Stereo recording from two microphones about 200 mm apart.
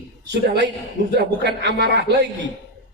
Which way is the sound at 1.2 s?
55° right (ahead or behind).